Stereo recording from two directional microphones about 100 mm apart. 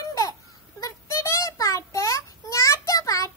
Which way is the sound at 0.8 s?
30° left (ahead or behind).